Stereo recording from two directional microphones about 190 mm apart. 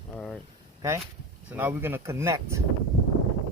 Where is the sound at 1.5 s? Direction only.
10° right (ahead or behind).